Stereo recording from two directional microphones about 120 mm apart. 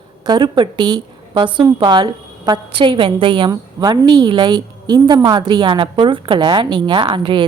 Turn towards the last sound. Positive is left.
turn(degrees=-45)  # may be behind; listen again after turning